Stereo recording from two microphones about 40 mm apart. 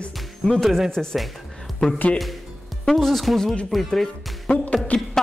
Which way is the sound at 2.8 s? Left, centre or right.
Centre.